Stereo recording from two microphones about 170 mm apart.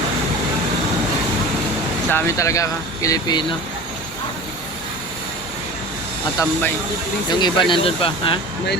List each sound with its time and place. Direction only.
2.0 s speech: 15° left (ahead or behind)
7.3 s speech: 25° left (ahead or behind)